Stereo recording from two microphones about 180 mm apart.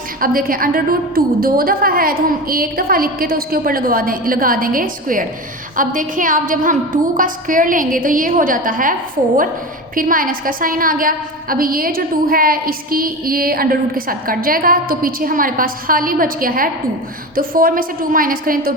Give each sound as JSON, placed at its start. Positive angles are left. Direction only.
{"t": 0.2, "sound": "a woman's voice", "side_deg": -50}